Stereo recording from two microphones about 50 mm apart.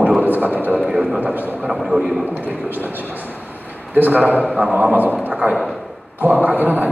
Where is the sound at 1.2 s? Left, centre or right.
Right.